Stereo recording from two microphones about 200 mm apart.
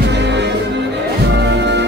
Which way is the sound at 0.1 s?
60° right (ahead or behind).